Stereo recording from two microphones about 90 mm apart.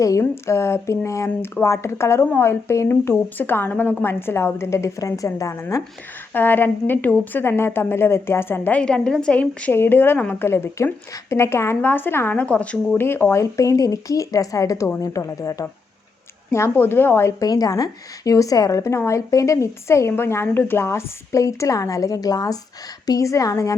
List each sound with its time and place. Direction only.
0.0 s a woman's voice: 35° left (ahead or behind)
6.3 s a woman's voice: 20° left (ahead or behind)
8.8 s a woman's voice: 10° left (ahead or behind)
13.0 s a woman's voice: 25° left (ahead or behind)
13.4 s a woman's voice: 35° left (ahead or behind)
16.5 s a woman's voice: 25° left (ahead or behind)
17.4 s a woman's voice: 45° left (ahead or behind)